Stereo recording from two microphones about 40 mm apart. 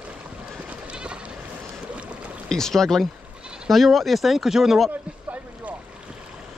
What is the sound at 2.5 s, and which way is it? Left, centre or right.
Speech, centre.